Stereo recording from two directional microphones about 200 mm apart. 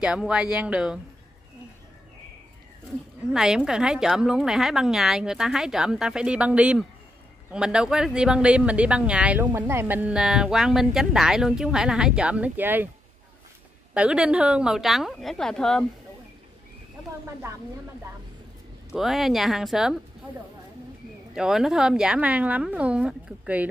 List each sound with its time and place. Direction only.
0.0 s speech: 5° right (ahead or behind)
3.3 s speech: 5° right (ahead or behind)
13.9 s speech: 5° right (ahead or behind)
18.9 s speech: centre (ahead or behind)
21.4 s speech: centre (ahead or behind)